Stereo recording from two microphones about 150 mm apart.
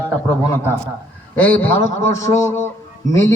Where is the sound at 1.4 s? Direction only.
10° left (ahead or behind).